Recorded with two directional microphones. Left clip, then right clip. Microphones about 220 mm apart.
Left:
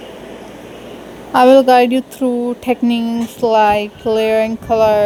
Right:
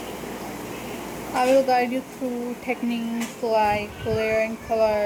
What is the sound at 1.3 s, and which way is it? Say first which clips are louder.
Speech: left 11 dB; 45° left (ahead or behind).